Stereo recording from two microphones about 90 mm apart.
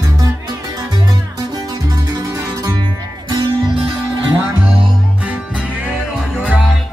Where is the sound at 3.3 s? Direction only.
65° right (ahead or behind).